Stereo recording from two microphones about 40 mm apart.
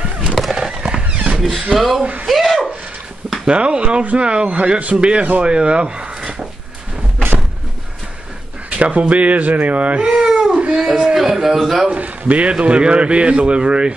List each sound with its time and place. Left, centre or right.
0.4 s horse: centre
0.7 s a sound: centre
1.1 s a sound: right
1.4 s speech: centre
2.2 s a sound: centre
3.4 s a man's voice: right
4.6 s a man's voice: right
8.6 s speech: right
10.2 s baby cry: centre
10.5 s dog: right
10.9 s speech: centre
11.1 s speech: centre
11.9 s a man's voice: right